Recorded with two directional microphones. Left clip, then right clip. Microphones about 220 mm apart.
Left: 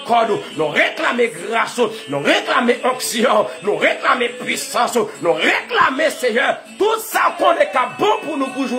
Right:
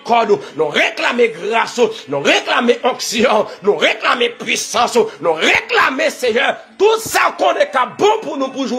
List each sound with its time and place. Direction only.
0.1 s speech: 20° right (ahead or behind)